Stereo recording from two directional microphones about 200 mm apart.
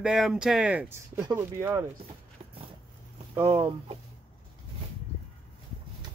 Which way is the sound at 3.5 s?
25° right (ahead or behind).